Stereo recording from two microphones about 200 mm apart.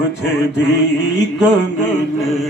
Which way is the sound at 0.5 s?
60° left (ahead or behind).